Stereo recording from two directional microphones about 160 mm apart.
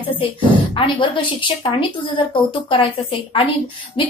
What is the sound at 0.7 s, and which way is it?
A woman's voice, 30° left (ahead or behind).